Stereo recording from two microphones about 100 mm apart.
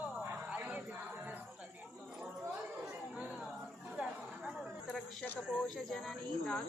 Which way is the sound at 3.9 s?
5° right (ahead or behind).